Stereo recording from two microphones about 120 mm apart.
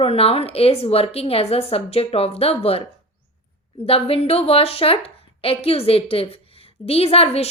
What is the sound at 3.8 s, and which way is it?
A woman's voice, 50° left (ahead or behind).